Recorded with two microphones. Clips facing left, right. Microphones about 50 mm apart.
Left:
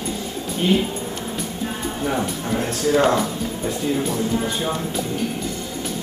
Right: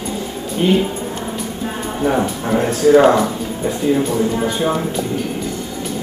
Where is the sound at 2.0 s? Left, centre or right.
Right.